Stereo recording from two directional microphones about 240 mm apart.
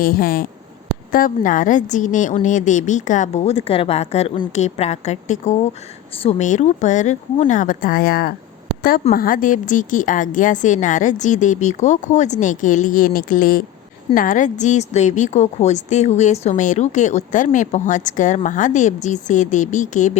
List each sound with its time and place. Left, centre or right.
0.0 s a woman's voice: left